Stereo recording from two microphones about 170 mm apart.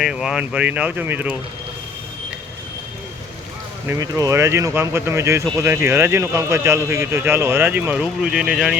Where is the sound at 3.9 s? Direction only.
20° right (ahead or behind).